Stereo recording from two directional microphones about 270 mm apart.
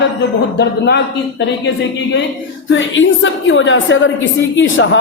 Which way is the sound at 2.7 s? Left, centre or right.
Left.